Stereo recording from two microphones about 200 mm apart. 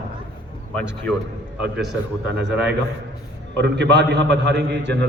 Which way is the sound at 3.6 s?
60° right (ahead or behind).